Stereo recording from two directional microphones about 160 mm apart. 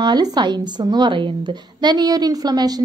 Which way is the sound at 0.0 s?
25° right (ahead or behind).